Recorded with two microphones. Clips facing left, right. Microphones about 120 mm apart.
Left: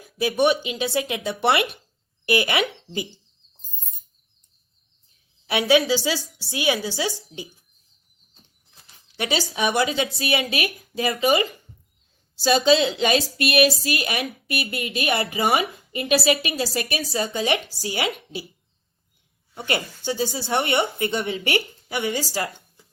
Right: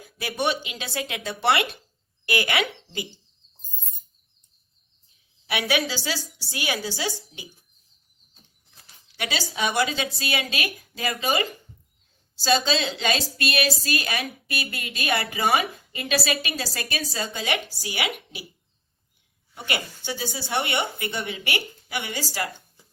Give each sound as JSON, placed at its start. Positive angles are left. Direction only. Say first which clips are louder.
{"t": 0.2, "sound": "a woman's voice", "louder": "left 6 dB", "side_deg": 15}
{"t": 5.5, "sound": "a woman's voice", "louder": "left 7 dB", "side_deg": 25}
{"t": 9.1, "sound": "a woman's voice", "louder": "left 4 dB", "side_deg": 25}
{"t": 19.6, "sound": "speech", "louder": "left 5 dB", "side_deg": 35}